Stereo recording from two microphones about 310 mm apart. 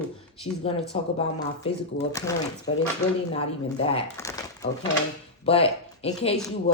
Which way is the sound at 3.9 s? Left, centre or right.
Centre.